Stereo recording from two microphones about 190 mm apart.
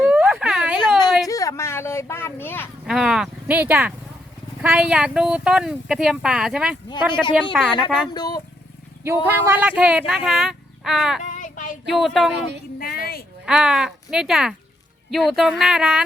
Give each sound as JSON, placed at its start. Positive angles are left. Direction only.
{"t": 0.0, "sound": "a sound", "side_deg": -5}
{"t": 0.8, "sound": "a sound", "side_deg": 20}
{"t": 2.8, "sound": "speech", "side_deg": -5}
{"t": 8.1, "sound": "speech", "side_deg": 20}
{"t": 9.2, "sound": "speech", "side_deg": -10}
{"t": 11.2, "sound": "child singing", "side_deg": 45}
{"t": 11.9, "sound": "speech", "side_deg": 0}
{"t": 12.8, "sound": "a sound", "side_deg": 55}
{"t": 13.4, "sound": "speech", "side_deg": -5}